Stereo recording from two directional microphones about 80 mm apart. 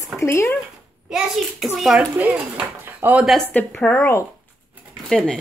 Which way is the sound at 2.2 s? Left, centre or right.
Centre.